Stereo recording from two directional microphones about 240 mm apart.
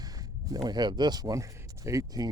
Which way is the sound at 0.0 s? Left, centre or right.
Centre.